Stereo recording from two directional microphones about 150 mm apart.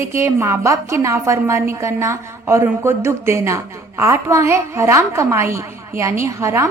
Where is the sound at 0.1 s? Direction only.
15° right (ahead or behind).